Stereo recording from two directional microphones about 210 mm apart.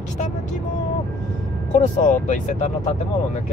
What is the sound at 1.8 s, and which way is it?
Speech, 35° left (ahead or behind).